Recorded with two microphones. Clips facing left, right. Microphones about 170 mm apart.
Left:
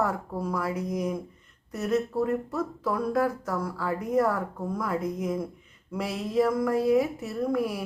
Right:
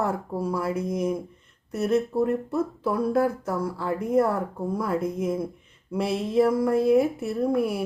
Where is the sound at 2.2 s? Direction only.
25° right (ahead or behind).